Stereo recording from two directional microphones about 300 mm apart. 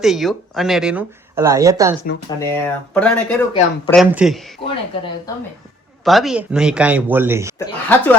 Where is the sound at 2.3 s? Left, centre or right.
Centre.